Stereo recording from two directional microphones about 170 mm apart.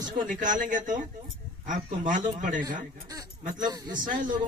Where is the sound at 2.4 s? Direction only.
50° right (ahead or behind).